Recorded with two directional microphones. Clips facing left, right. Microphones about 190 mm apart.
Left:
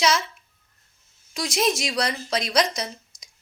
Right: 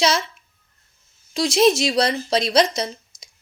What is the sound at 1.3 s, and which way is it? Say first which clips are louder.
A woman's voice: right 8 dB; 25° right (ahead or behind).